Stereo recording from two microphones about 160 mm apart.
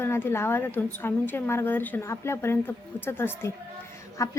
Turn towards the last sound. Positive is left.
turn(degrees=20)  # may be behind; listen again after turning